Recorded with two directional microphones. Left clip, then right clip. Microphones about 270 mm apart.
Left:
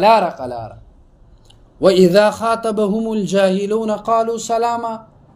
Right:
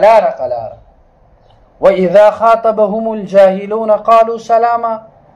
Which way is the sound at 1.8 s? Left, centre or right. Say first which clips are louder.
Right 4 dB; left.